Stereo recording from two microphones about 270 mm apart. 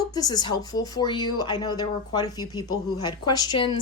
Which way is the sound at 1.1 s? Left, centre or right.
Left.